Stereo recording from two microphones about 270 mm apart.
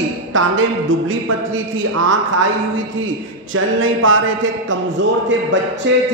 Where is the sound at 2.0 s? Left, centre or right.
Right.